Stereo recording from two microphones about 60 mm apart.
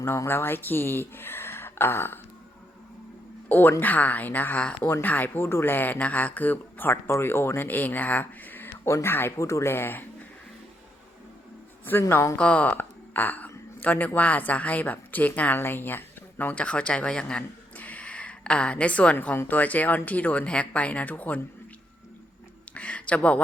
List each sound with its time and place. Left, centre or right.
0.3 s speech: left
3.5 s a woman's voice: left
7.8 s speech: left
8.9 s speech: left
9.7 s speech: left
11.9 s speech: left
12.4 s a woman's voice: left
16.6 s speech: centre
17.7 s a sound: left
19.5 s a woman's voice: left
22.7 s speech: left